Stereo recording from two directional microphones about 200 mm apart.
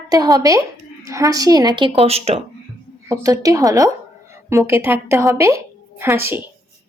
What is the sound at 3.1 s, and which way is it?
A woman's voice, 15° right (ahead or behind).